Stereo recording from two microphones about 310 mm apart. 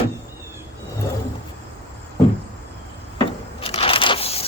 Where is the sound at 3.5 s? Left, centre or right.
Centre.